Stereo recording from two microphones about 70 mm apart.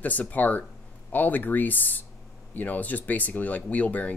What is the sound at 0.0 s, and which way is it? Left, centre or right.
Speech, left.